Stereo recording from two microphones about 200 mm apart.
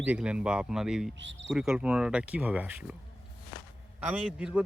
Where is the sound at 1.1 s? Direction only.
65° right (ahead or behind).